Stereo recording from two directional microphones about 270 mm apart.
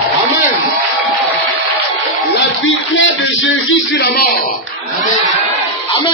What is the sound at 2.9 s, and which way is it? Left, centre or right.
Music, left.